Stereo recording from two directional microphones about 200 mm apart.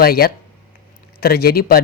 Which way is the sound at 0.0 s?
50° left (ahead or behind).